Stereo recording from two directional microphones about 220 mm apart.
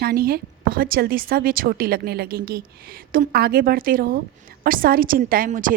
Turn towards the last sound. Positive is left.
turn(degrees=-35)  # may be behind; listen again after turning